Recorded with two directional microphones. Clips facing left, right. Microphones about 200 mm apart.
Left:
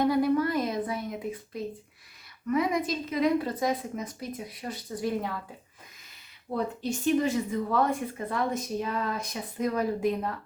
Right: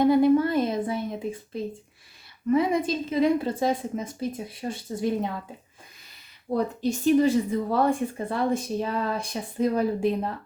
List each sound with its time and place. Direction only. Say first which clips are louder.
0.1 s a sound: right 5 dB; 25° right (ahead or behind)
2.5 s a woman's voice: right 4 dB; 30° right (ahead or behind)
6.5 s a woman's voice: right 5 dB; 35° right (ahead or behind)